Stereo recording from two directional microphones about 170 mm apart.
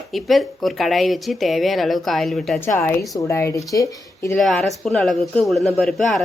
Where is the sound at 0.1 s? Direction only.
Centre (ahead or behind).